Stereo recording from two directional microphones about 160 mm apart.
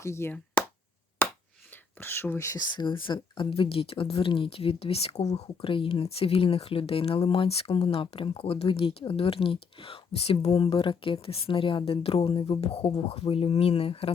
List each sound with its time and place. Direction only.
0.0 s speech: 15° left (ahead or behind)
1.2 s finger snapping: 15° left (ahead or behind)
1.7 s speech: 15° left (ahead or behind); by 14.1 s 35° left (ahead or behind)